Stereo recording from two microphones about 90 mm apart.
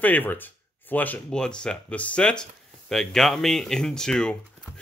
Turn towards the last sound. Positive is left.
turn(degrees=10)  # may be behind; listen again after turning